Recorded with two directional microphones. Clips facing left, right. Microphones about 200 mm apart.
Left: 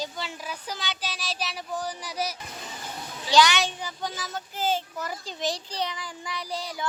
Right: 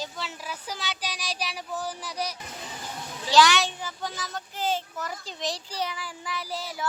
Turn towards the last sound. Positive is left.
turn(degrees=-5)  # may be behind; listen again after turning